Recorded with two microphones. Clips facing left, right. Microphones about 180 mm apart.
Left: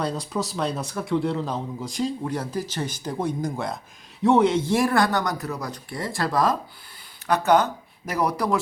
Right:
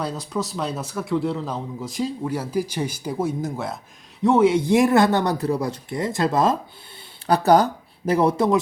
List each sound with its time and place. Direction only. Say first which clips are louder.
0.0 s a man's voice: even; centre (ahead or behind); by 6.6 s 25° right (ahead or behind)
7.3 s speech: right 3 dB; 35° right (ahead or behind)